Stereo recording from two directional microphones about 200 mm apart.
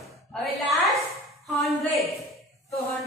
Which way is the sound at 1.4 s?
Centre (ahead or behind).